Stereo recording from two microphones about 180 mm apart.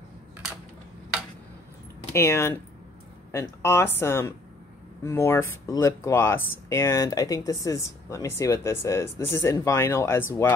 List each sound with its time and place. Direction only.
2.1 s speech: 15° left (ahead or behind)